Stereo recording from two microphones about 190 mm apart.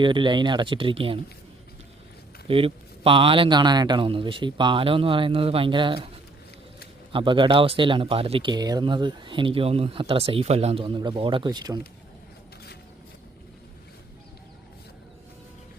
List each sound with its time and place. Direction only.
0.0 s speech: 25° right (ahead or behind)
2.5 s speech: 30° right (ahead or behind)
7.1 s speech: 25° right (ahead or behind)